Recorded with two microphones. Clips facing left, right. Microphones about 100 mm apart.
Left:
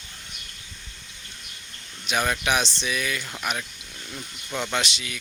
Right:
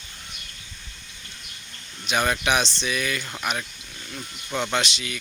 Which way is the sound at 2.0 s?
Centre (ahead or behind).